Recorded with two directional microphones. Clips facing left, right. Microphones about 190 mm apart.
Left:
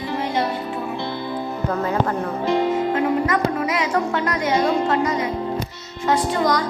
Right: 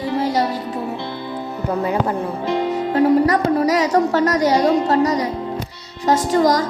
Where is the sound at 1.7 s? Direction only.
15° right (ahead or behind).